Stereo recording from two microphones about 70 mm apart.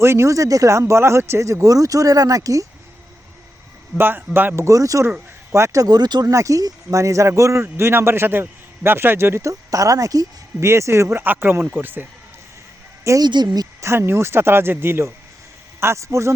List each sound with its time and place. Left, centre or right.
0.0 s speech: right
3.9 s speech: right
4.6 s speech: right
5.8 s speech: right
6.3 s speech: right
10.6 s speech: right
13.2 s speech: right
13.8 s speech: right